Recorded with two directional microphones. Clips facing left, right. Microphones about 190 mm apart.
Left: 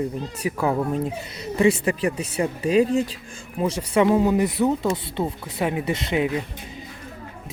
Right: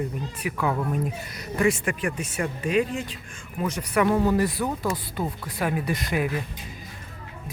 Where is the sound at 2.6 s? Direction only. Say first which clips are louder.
Left 6 dB; 35° left (ahead or behind).